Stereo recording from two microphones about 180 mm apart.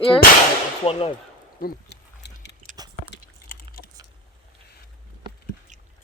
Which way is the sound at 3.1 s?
55° left (ahead or behind).